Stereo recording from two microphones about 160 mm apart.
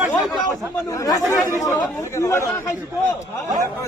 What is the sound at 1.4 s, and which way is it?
Speech, 20° left (ahead or behind).